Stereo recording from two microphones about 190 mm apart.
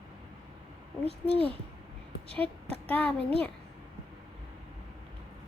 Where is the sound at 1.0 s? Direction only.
30° right (ahead or behind).